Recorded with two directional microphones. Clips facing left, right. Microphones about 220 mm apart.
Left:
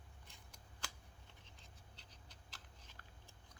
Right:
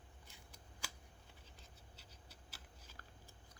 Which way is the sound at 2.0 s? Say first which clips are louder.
Right 2 dB; 5° right (ahead or behind).